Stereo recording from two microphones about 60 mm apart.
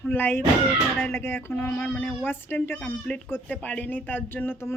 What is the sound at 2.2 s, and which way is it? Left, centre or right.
Speech, left.